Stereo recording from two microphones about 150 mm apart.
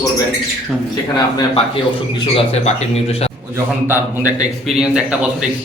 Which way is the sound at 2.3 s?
45° left (ahead or behind).